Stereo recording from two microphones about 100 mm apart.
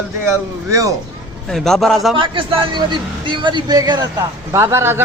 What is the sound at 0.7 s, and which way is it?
Speech, 35° right (ahead or behind).